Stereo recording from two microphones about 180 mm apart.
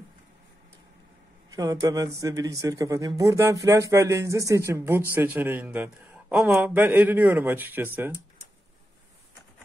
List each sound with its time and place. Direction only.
1.5 s a man's voice: 20° right (ahead or behind)